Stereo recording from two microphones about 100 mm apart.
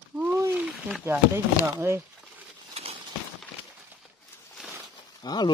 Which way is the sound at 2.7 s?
90° right.